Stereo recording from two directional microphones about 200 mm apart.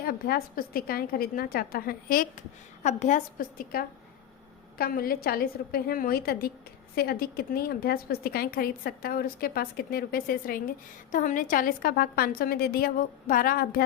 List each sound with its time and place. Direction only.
0.1 s a woman's voice: 50° left (ahead or behind)